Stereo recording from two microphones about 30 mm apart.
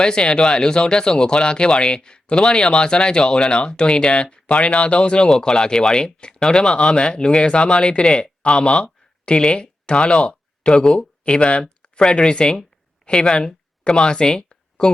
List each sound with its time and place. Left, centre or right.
0.0 s speech: left
5.4 s speech: left
11.6 s speech: left